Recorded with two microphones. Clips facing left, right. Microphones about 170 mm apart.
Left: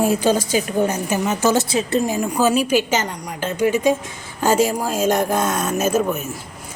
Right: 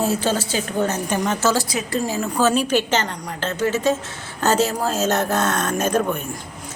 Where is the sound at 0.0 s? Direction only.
15° left (ahead or behind).